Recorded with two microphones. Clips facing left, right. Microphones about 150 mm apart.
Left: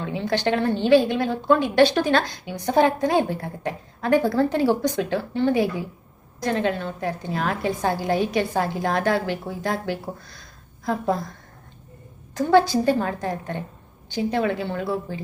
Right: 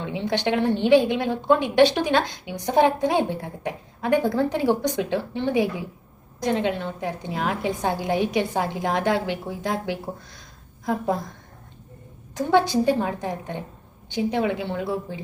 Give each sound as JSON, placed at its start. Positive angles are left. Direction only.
{"t": 0.0, "sound": "a woman's voice", "side_deg": -20}
{"t": 12.4, "sound": "a woman's voice", "side_deg": -15}